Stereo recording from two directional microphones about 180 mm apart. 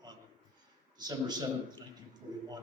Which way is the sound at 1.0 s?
20° right (ahead or behind).